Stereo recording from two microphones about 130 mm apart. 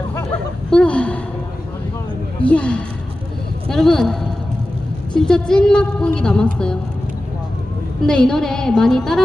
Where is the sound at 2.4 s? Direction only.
10° left (ahead or behind).